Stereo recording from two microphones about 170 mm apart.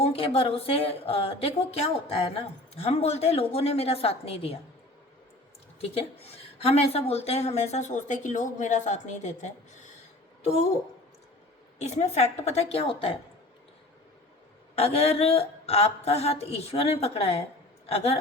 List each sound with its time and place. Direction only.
0.0 s speech: 35° left (ahead or behind)
5.8 s a woman's voice: 35° left (ahead or behind)
11.8 s speech: 40° left (ahead or behind)
14.8 s speech: 35° left (ahead or behind)